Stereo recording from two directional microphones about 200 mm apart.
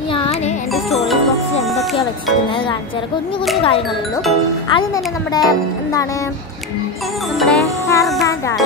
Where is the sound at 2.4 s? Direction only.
25° left (ahead or behind).